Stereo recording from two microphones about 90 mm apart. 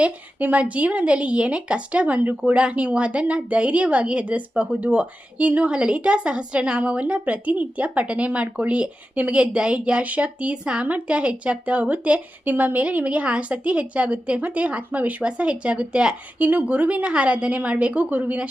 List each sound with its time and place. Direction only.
0.0 s a woman's voice: 15° right (ahead or behind)